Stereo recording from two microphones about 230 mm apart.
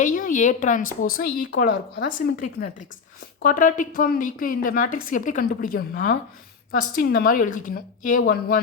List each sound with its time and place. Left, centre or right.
0.0 s a woman's voice: left
3.4 s a woman's voice: left